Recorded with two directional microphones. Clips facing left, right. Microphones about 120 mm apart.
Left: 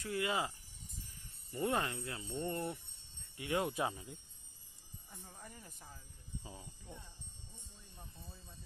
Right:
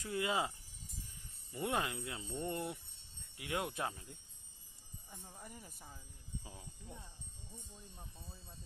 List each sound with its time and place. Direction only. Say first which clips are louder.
0.0 s wind chime: even; 20° right (ahead or behind)
1.5 s speech: left 2 dB; 5° right (ahead or behind)
6.4 s speech: left 1 dB; 5° left (ahead or behind)